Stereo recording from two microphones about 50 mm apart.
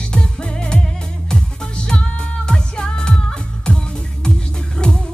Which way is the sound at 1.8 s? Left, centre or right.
Left.